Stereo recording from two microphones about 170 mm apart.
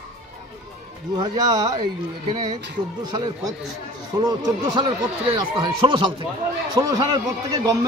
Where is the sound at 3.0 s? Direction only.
25° right (ahead or behind).